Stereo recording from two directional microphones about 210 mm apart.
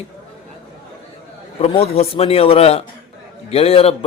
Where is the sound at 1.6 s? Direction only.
30° left (ahead or behind).